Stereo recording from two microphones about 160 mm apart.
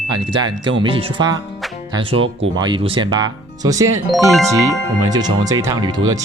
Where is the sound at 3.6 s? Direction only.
20° right (ahead or behind).